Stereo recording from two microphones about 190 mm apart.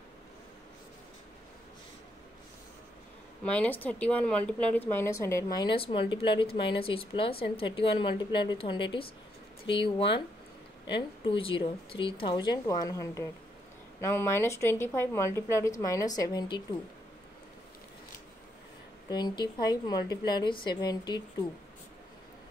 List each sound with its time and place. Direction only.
3.4 s speech: 10° left (ahead or behind)
19.0 s speech: 20° left (ahead or behind)